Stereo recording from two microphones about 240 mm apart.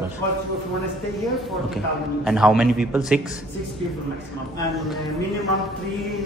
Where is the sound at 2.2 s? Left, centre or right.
Centre.